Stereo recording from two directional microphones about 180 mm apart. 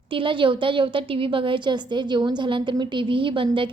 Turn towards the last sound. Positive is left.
turn(degrees=-30)  # may be behind; listen again after turning